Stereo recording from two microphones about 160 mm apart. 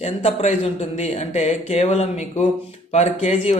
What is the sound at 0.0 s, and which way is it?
Speech, 45° left (ahead or behind).